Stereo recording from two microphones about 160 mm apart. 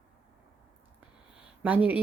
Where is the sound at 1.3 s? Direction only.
10° right (ahead or behind).